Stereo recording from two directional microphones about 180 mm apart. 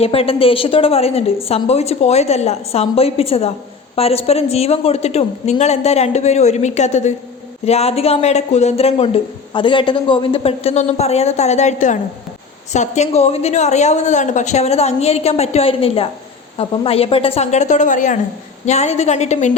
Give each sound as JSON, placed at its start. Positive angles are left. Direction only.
{"t": 0.0, "sound": "speech", "side_deg": 35}